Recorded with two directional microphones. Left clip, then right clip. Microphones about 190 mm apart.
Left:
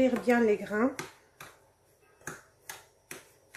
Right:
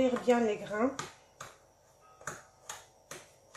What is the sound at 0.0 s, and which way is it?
Speech, 35° left (ahead or behind).